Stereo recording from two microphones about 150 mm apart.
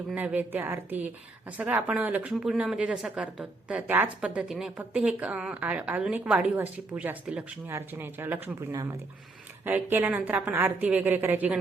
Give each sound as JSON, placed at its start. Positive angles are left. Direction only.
{"t": 0.1, "sound": "a woman's voice", "side_deg": -10}
{"t": 8.7, "sound": "speech", "side_deg": -25}
{"t": 9.6, "sound": "a woman's voice", "side_deg": -10}